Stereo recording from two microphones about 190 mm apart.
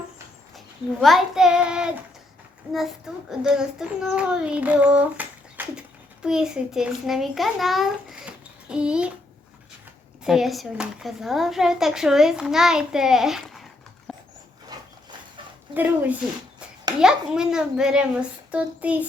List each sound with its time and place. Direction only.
1.0 s speech: centre (ahead or behind)
10.2 s speech: centre (ahead or behind)
14.1 s dog: centre (ahead or behind)
14.7 s a sound: 20° right (ahead or behind)
15.7 s speech: 10° right (ahead or behind)